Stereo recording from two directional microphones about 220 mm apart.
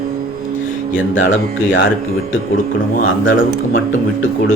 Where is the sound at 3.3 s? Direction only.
60° left (ahead or behind).